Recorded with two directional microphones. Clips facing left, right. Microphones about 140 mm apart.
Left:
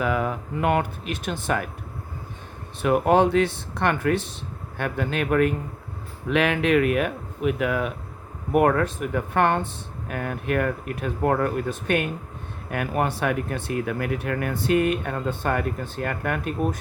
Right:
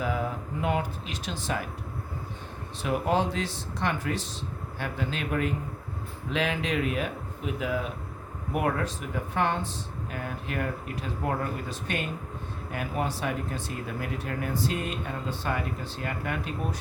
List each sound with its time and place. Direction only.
0.0 s speech: 70° left (ahead or behind)
2.8 s speech: 60° left (ahead or behind)